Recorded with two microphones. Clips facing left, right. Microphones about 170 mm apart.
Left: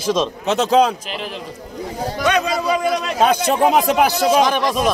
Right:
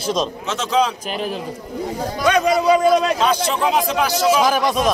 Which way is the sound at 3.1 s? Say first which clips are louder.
Left 3 dB; 55° left (ahead or behind).